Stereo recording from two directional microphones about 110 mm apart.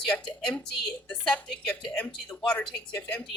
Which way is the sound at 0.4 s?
5° left (ahead or behind).